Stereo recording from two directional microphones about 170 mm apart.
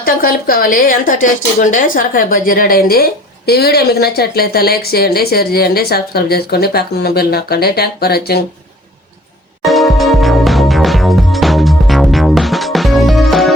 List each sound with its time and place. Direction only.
0.0 s a woman's voice: 55° left (ahead or behind)
9.6 s music: centre (ahead or behind)